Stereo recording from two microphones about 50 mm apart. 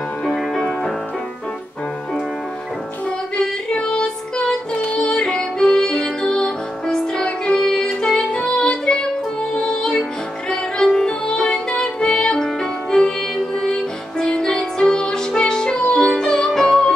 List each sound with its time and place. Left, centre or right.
3.3 s music: centre
13.6 s music: centre